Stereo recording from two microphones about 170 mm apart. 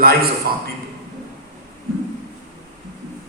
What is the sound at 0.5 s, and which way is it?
Speech, 65° right (ahead or behind).